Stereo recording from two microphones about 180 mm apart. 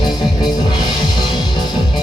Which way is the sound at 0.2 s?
25° left (ahead or behind).